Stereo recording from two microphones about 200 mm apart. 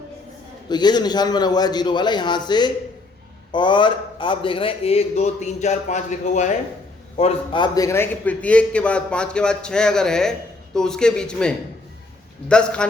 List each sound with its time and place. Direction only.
0.7 s a man's voice: 20° left (ahead or behind); by 12.9 s 5° left (ahead or behind)